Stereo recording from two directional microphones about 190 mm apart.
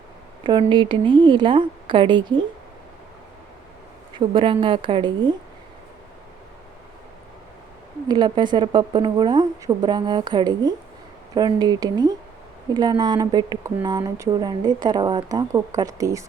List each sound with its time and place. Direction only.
0.4 s a woman's voice: 25° right (ahead or behind)
4.2 s a woman's voice: 25° right (ahead or behind)
8.0 s a woman's voice: 25° right (ahead or behind)